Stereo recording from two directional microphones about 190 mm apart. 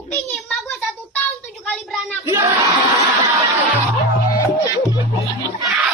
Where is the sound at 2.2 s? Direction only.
15° right (ahead or behind).